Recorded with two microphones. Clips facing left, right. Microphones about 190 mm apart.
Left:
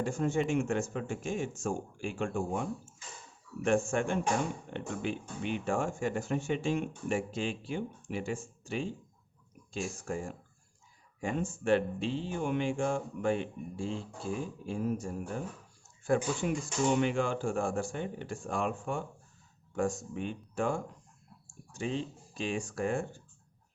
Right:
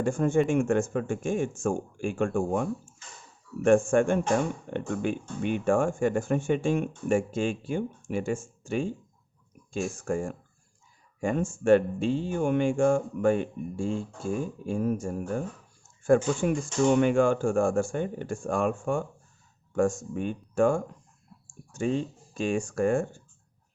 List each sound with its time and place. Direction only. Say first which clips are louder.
0.0 s speech: right 6 dB; 50° right (ahead or behind)